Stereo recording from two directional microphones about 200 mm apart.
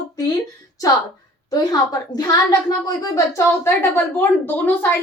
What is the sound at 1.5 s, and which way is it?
A woman's voice, 20° left (ahead or behind).